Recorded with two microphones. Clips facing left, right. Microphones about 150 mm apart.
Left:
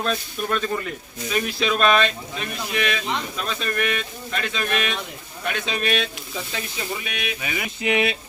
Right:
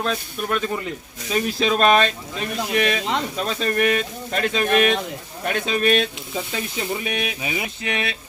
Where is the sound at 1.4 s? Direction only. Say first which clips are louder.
Right 3 dB; 40° right (ahead or behind).